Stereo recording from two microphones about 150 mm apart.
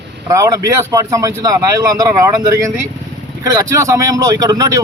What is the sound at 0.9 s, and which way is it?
Speech, 20° right (ahead or behind).